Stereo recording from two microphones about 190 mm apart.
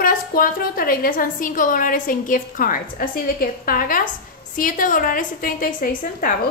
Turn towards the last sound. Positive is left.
turn(degrees=45)  # may be behind; listen again after turning